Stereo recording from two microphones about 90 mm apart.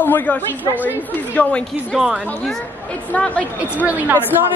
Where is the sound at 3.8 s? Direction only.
20° right (ahead or behind).